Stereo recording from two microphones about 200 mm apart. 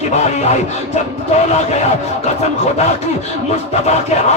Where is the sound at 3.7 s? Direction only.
35° left (ahead or behind).